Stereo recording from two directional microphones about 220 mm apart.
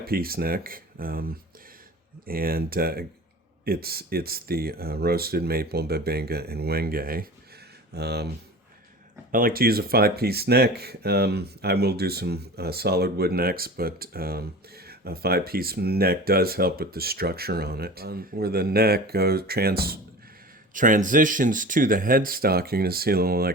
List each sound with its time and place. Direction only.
0.0 s speech: 45° right (ahead or behind)
9.3 s speech: 40° right (ahead or behind)